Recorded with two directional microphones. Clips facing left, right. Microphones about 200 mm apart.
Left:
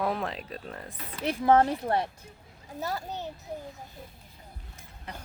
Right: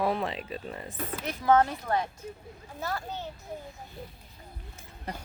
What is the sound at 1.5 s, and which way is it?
Speech, 30° left (ahead or behind).